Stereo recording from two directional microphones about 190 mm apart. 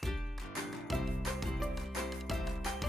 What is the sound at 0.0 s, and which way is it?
Music, centre (ahead or behind).